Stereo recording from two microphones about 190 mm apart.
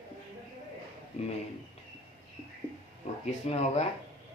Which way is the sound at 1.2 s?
35° left (ahead or behind).